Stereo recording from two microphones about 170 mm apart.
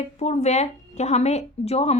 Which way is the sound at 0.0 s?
40° left (ahead or behind).